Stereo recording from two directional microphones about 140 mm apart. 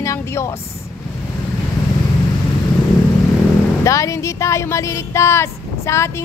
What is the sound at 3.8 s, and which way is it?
Speech, 20° left (ahead or behind).